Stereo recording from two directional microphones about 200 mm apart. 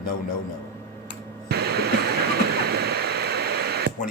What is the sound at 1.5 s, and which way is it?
Waterfall, 50° right (ahead or behind).